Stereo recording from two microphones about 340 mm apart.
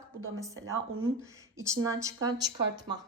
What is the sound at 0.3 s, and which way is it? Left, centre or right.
A woman's voice, centre.